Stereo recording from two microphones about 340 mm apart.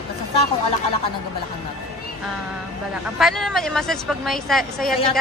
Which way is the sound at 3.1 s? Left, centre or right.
Centre.